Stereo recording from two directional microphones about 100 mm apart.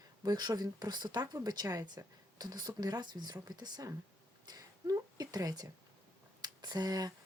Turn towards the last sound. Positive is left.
turn(degrees=-40)  # may be behind; listen again after turning